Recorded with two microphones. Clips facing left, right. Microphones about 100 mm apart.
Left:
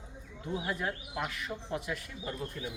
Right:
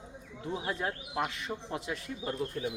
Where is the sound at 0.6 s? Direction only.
30° right (ahead or behind).